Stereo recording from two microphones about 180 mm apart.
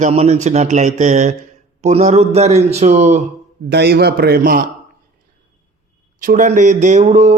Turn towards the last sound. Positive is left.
turn(degrees=-40)  # may be behind; listen again after turning